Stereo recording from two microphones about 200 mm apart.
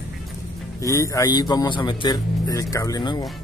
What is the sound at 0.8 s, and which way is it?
A man's voice, 15° left (ahead or behind).